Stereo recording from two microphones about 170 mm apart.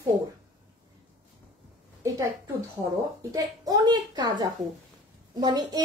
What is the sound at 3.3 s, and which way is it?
A woman's voice, 20° right (ahead or behind).